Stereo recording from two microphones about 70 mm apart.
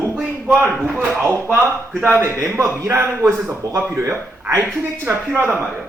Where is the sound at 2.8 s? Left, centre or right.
Right.